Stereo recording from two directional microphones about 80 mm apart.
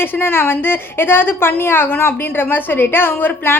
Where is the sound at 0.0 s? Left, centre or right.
Left.